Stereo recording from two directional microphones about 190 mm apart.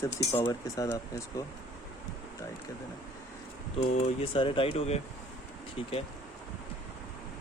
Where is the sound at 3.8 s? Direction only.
35° left (ahead or behind).